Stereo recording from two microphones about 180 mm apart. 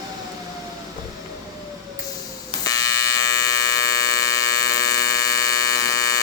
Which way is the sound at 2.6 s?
20° left (ahead or behind).